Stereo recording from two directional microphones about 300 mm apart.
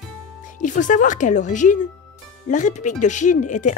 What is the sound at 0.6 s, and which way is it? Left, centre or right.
Speech, left.